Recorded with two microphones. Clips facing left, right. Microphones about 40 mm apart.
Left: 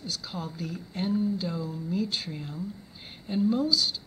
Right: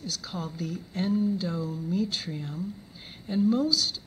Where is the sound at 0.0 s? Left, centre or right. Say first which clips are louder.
Right 1 dB; centre.